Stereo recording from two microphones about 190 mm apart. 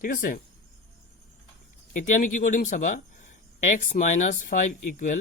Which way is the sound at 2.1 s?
45° left (ahead or behind).